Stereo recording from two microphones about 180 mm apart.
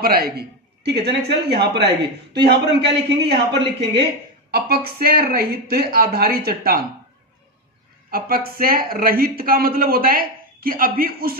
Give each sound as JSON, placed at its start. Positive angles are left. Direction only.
{"t": 0.0, "sound": "a man's voice", "side_deg": -60}
{"t": 4.5, "sound": "speech", "side_deg": -60}
{"t": 8.1, "sound": "speech", "side_deg": -55}